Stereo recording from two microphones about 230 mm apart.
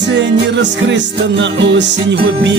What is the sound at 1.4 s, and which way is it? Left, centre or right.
Music, right.